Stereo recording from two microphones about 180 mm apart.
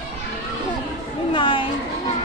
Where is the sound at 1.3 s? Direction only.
30° left (ahead or behind).